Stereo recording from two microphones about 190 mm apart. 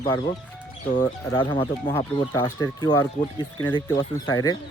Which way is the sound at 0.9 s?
25° left (ahead or behind).